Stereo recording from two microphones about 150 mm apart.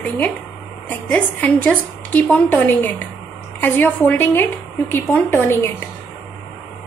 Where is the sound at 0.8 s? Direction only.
10° left (ahead or behind).